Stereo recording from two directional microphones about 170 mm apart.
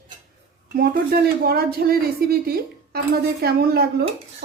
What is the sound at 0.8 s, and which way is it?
Speech, 65° right (ahead or behind).